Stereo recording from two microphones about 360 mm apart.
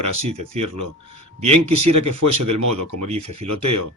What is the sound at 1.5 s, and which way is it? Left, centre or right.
Speech, right.